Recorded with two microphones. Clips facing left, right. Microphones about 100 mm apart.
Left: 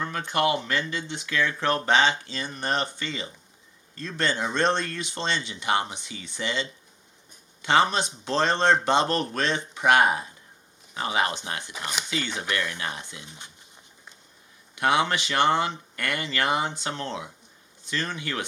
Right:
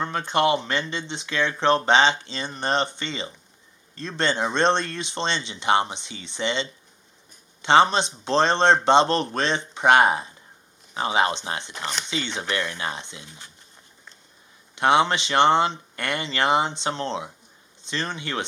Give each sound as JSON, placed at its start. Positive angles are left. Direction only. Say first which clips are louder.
{"t": 0.0, "sound": "speech", "louder": "right 3 dB", "side_deg": -30}
{"t": 11.7, "sound": "speech", "louder": "right 2 dB", "side_deg": 10}
{"t": 12.4, "sound": "speech", "louder": "right 2 dB", "side_deg": -30}
{"t": 13.2, "sound": "speech", "louder": "even", "side_deg": 20}
{"t": 14.8, "sound": "speech", "louder": "right 4 dB", "side_deg": -25}